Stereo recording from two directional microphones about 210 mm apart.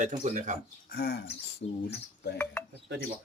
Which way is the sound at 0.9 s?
50° left (ahead or behind).